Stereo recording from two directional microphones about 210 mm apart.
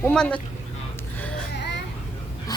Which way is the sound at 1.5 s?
55° left (ahead or behind).